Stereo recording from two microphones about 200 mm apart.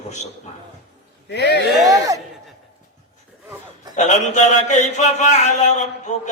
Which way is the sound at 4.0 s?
35° left (ahead or behind).